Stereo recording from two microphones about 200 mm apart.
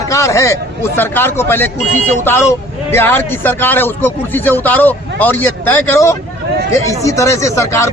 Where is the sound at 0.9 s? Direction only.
10° left (ahead or behind).